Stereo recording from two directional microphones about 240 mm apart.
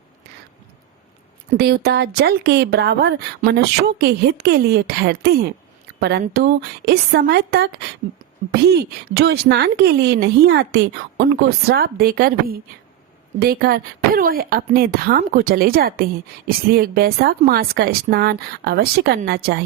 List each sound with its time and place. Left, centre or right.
1.5 s speech: right